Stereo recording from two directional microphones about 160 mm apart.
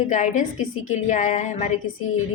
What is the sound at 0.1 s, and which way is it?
A woman's voice, 50° left (ahead or behind).